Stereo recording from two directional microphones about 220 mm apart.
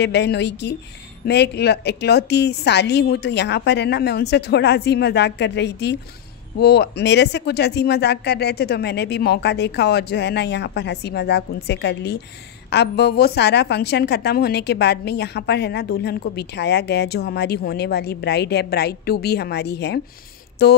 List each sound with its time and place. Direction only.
0.0 s a woman's voice: 50° left (ahead or behind)